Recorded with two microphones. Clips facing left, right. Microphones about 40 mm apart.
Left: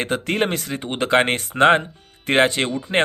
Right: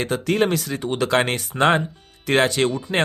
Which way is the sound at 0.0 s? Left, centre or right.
Left.